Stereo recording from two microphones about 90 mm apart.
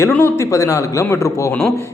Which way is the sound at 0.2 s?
30° left (ahead or behind).